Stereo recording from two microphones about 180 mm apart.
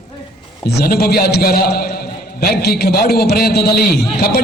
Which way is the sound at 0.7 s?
60° left (ahead or behind).